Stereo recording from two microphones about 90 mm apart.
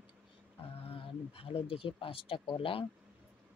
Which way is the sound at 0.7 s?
90° left.